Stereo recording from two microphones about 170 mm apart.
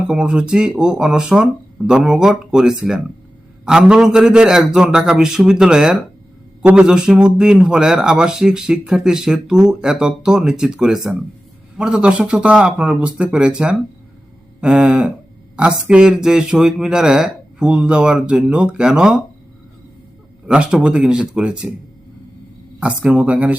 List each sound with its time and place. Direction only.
0.1 s speech: 5° right (ahead or behind)
20.5 s speech: 5° right (ahead or behind)
22.8 s speech: 5° right (ahead or behind)